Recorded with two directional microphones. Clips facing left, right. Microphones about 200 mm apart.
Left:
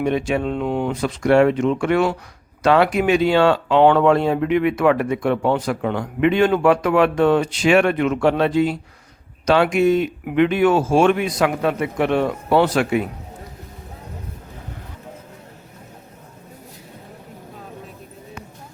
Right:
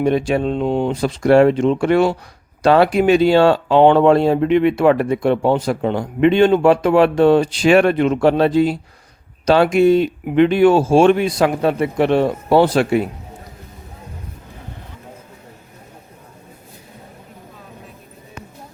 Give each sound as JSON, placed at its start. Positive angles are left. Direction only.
{"t": 0.0, "sound": "speech", "side_deg": -35}